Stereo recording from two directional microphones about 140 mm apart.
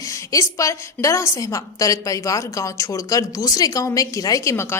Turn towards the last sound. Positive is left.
turn(degrees=20)  # may be behind; listen again after turning